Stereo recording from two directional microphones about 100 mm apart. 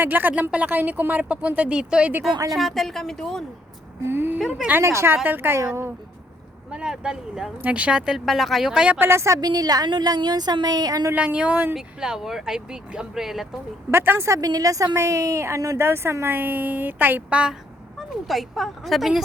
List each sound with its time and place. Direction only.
0.0 s speech: 20° right (ahead or behind)
2.5 s speech: centre (ahead or behind)
4.0 s speech: 20° right (ahead or behind)
5.1 s speech: 20° right (ahead or behind)
6.7 s speech: 10° right (ahead or behind)
9.0 s speech: 25° right (ahead or behind)
9.4 s speech: 40° right (ahead or behind)
11.1 s speech: 15° right (ahead or behind)
13.9 s speech: 20° right (ahead or behind)
18.3 s speech: centre (ahead or behind)